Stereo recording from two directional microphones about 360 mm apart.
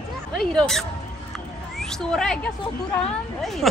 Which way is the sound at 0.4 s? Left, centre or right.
Centre.